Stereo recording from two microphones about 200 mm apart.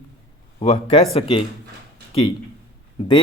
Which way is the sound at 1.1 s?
25° left (ahead or behind).